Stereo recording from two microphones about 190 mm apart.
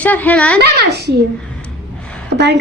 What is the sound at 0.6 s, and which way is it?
Speech, 60° right (ahead or behind).